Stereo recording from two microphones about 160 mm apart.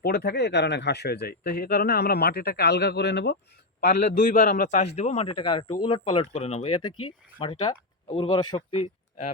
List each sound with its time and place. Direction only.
0.0 s speech: 80° left
3.8 s a man's voice: 60° left (ahead or behind); by 9.3 s 40° left (ahead or behind)